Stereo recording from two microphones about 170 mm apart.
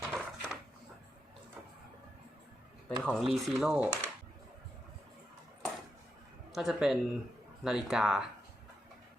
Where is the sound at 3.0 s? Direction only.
Centre (ahead or behind).